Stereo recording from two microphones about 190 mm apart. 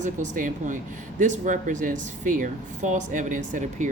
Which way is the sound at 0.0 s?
45° right (ahead or behind).